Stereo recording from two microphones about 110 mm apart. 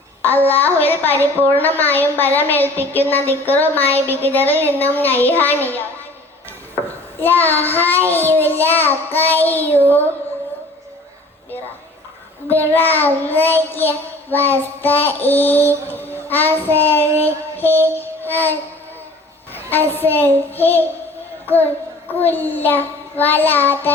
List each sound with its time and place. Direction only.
0.2 s child singing: 15° left (ahead or behind)
0.9 s a woman's voice: 15° left (ahead or behind)
7.2 s a woman's voice: 15° left (ahead or behind)
12.5 s a woman's voice: 15° left (ahead or behind)
15.9 s child singing: 20° left (ahead or behind)
17.2 s a sound: 15° left (ahead or behind)
18.2 s child singing: 15° left (ahead or behind)
19.5 s a woman's voice: 20° left (ahead or behind)
21.4 s child singing: 15° left (ahead or behind)
22.2 s a woman's voice: 15° left (ahead or behind)